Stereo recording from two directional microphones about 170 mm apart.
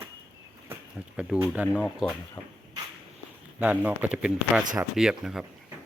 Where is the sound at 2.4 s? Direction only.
25° left (ahead or behind).